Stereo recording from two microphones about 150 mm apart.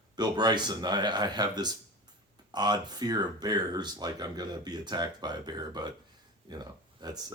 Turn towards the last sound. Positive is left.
turn(degrees=-25)  # may be behind; listen again after turning